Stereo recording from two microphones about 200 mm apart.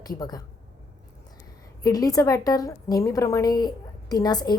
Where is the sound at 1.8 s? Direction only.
20° left (ahead or behind).